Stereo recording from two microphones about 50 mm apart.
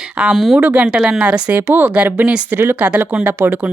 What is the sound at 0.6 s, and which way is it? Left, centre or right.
Speech, right.